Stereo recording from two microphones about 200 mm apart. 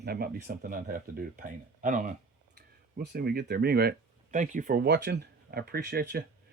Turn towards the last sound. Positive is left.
turn(degrees=-55)  # may be behind; listen again after turning